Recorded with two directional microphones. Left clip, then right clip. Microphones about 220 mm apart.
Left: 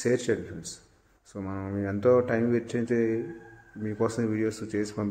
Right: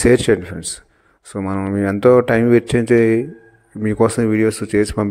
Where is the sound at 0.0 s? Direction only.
45° right (ahead or behind).